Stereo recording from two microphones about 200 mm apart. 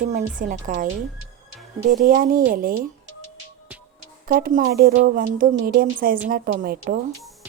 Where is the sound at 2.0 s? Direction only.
45° right (ahead or behind).